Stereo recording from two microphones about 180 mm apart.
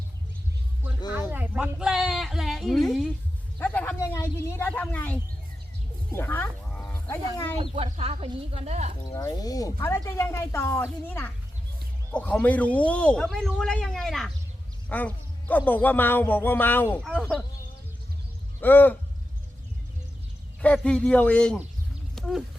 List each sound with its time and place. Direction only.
1.3 s a man's voice: 10° right (ahead or behind); by 5.2 s 10° left (ahead or behind)
6.1 s livestock: 15° left (ahead or behind)
7.6 s a woman's voice: 30° right (ahead or behind)
9.1 s a man's voice: 20° left (ahead or behind)
18.6 s speech: 10° left (ahead or behind)
20.6 s speech: 5° left (ahead or behind)
22.1 s a sound: centre (ahead or behind)